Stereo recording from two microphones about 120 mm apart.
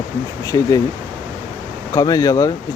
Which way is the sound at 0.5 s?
40° left (ahead or behind).